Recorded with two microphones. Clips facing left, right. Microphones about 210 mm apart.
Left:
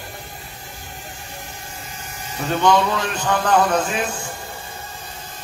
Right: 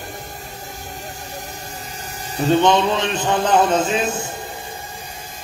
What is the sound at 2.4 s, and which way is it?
A man's voice, 20° right (ahead or behind).